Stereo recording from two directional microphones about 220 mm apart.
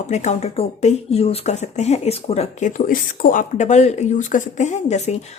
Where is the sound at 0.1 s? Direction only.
30° left (ahead or behind).